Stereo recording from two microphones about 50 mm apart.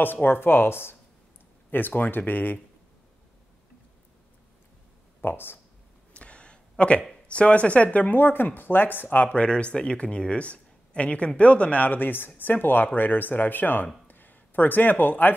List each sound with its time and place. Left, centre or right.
0.0 s a woman's voice: left
5.2 s a woman's voice: left
6.1 s a sound: left
7.2 s speech: left
8.2 s speech: left
9.3 s speech: left
14.0 s a sound: left